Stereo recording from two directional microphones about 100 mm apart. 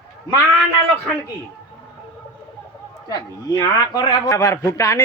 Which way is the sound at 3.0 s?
40° left (ahead or behind).